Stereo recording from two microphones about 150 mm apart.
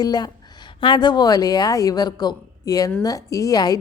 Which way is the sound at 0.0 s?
25° left (ahead or behind).